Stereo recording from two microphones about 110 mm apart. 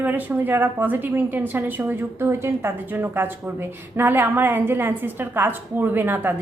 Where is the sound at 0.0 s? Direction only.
15° right (ahead or behind).